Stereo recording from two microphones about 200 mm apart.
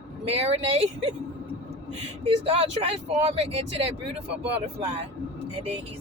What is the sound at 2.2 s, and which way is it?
Speech, 30° right (ahead or behind).